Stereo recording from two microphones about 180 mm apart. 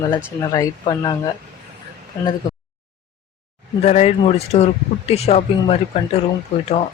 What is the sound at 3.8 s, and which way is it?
Speech, 35° left (ahead or behind).